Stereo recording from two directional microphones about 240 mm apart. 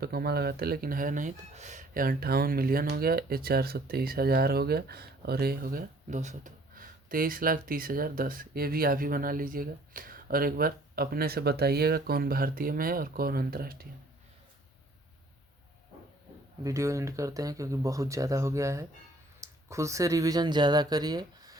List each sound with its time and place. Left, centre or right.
0.0 s speech: right
16.6 s speech: centre